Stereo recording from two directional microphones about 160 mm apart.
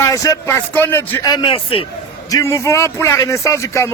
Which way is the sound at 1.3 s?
30° left (ahead or behind).